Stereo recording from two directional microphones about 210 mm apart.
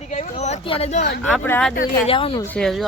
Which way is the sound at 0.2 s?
30° left (ahead or behind).